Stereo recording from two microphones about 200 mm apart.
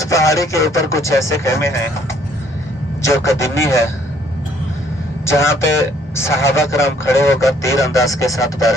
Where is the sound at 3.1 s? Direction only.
15° left (ahead or behind).